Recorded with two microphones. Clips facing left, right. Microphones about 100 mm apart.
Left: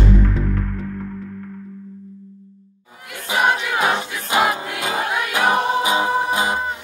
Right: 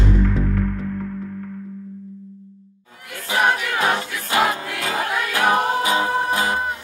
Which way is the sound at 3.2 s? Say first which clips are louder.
Left 1 dB; 20° left (ahead or behind).